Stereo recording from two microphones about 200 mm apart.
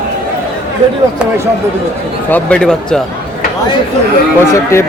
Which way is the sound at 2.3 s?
5° left (ahead or behind).